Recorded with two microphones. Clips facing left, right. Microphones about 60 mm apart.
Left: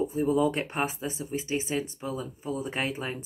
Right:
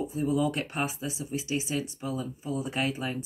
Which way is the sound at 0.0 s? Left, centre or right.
Left.